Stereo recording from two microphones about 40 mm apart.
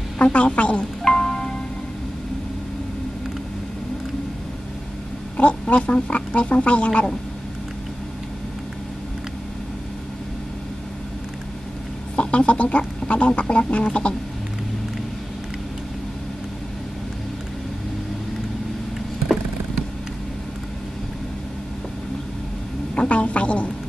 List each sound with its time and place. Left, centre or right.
0.2 s speech: left
1.1 s music: centre
5.4 s speech: left
12.2 s duck: left
22.9 s a woman's voice: left